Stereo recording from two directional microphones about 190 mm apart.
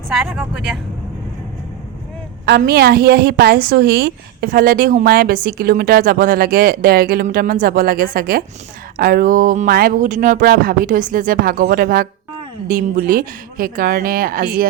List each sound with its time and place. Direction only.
0.1 s speech: centre (ahead or behind)
2.6 s a woman's voice: 55° right (ahead or behind)